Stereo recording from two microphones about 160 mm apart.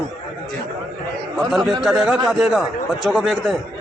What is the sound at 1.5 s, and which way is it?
A man's voice, centre (ahead or behind).